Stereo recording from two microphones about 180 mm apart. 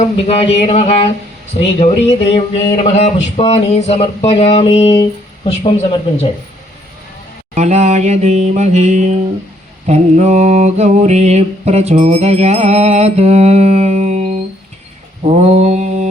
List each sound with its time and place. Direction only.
0.0 s speech: 35° left (ahead or behind)
7.5 s mantra: 40° right (ahead or behind)